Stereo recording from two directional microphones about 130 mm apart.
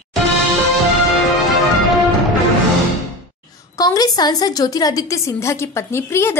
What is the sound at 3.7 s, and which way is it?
A woman's voice, 30° left (ahead or behind).